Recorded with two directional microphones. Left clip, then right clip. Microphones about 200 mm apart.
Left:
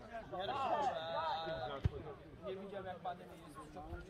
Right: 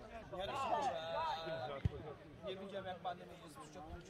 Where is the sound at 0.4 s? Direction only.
55° right (ahead or behind).